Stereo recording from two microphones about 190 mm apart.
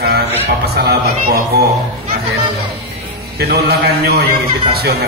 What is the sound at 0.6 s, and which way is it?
Speech, 55° right (ahead or behind).